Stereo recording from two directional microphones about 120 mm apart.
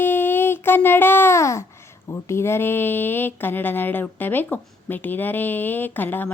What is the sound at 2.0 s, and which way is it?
Speech, 25° left (ahead or behind).